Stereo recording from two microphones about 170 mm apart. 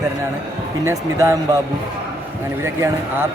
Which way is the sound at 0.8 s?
15° right (ahead or behind).